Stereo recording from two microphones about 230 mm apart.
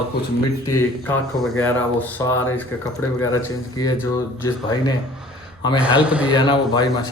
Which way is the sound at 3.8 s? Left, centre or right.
Centre.